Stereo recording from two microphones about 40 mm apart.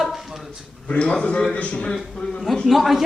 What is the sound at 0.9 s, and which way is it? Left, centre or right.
Speech, left.